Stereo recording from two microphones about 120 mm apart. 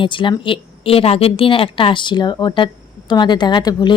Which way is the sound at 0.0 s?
45° left (ahead or behind).